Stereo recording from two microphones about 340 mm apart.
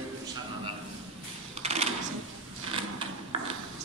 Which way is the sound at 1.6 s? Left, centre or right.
Centre.